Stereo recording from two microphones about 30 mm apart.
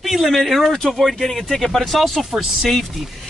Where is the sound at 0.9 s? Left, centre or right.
Centre.